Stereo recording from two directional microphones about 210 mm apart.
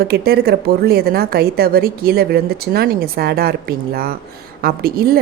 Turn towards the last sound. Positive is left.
turn(degrees=-45)  # may be behind; listen again after turning